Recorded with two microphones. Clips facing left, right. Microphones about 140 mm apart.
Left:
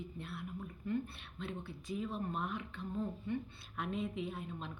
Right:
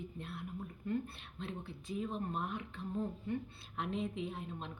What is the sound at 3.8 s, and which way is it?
Speech, 25° right (ahead or behind).